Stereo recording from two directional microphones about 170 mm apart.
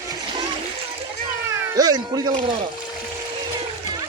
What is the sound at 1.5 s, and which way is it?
Cat, 20° right (ahead or behind).